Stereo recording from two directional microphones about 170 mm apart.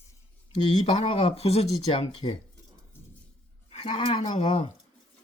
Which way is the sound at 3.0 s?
15° left (ahead or behind).